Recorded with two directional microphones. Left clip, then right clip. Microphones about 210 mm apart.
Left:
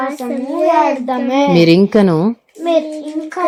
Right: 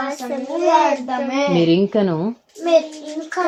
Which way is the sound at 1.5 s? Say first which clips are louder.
Left 6 dB; 20° left (ahead or behind).